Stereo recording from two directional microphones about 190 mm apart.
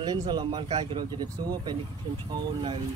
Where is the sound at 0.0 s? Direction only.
20° right (ahead or behind).